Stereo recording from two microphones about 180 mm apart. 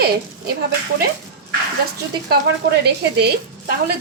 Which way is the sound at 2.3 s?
65° right (ahead or behind).